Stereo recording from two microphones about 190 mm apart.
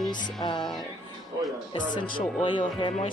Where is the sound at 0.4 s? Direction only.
25° left (ahead or behind).